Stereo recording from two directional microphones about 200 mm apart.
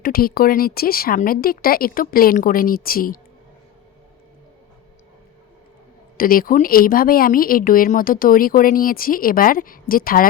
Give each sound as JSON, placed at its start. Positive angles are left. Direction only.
{"t": 0.0, "sound": "a woman's voice", "side_deg": 45}
{"t": 6.1, "sound": "a woman's voice", "side_deg": 45}